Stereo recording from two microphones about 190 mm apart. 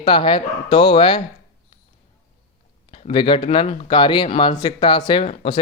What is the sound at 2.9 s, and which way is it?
A man's voice, 25° left (ahead or behind).